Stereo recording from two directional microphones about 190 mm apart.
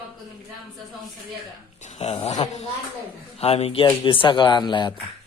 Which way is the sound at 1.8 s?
35° left (ahead or behind).